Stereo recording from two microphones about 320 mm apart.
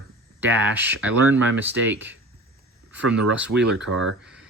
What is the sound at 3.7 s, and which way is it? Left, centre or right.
Speech, right.